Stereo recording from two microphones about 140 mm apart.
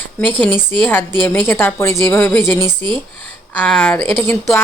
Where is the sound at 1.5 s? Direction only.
15° left (ahead or behind).